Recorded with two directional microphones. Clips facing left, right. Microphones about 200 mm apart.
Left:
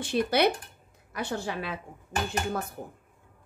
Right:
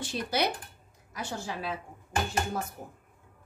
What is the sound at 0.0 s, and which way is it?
A woman's voice, 60° left (ahead or behind).